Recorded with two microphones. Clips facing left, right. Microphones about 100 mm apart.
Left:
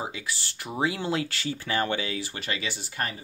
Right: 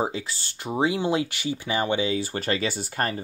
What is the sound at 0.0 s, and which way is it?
Speech, 30° right (ahead or behind).